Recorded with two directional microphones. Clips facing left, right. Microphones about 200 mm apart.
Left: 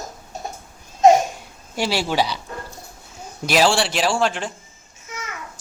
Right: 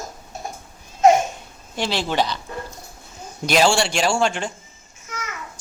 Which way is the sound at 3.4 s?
5° left (ahead or behind).